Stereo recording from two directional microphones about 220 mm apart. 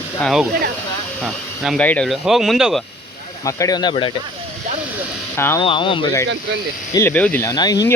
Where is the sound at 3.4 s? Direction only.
15° left (ahead or behind).